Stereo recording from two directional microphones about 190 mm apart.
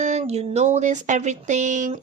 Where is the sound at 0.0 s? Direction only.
35° right (ahead or behind).